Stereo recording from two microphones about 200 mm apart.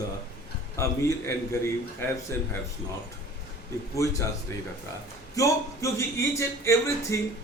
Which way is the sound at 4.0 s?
15° left (ahead or behind).